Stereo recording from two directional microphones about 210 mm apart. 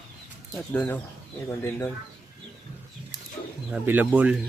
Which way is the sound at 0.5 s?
10° left (ahead or behind).